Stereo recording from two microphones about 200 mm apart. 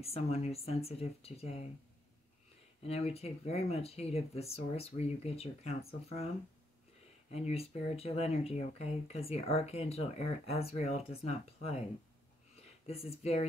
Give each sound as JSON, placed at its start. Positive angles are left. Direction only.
{"t": 0.0, "sound": "speech", "side_deg": 30}
{"t": 2.8, "sound": "speech", "side_deg": 30}
{"t": 12.8, "sound": "speech", "side_deg": 30}